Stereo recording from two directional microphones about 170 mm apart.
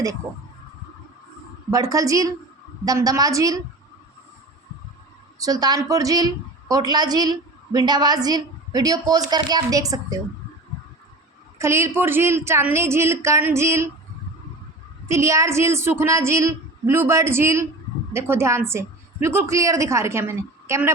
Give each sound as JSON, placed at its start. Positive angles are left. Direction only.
{"t": 1.7, "sound": "a woman's voice", "side_deg": -20}
{"t": 5.4, "sound": "a woman's voice", "side_deg": -20}
{"t": 11.5, "sound": "a woman's voice", "side_deg": -15}
{"t": 15.0, "sound": "a woman's voice", "side_deg": -15}